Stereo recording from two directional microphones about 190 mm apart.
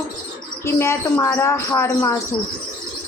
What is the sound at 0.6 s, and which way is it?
A woman's voice, 15° left (ahead or behind).